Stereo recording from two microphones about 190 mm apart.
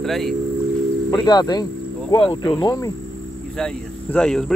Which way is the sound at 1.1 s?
20° left (ahead or behind).